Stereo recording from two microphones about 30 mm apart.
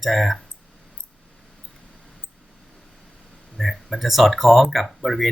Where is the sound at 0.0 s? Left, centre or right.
Centre.